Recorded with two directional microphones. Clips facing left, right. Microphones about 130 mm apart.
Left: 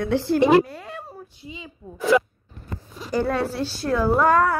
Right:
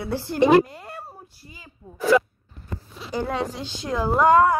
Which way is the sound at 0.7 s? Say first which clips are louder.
Left 2 dB; 10° right (ahead or behind).